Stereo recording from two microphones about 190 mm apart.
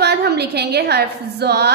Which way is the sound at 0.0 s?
60° right (ahead or behind).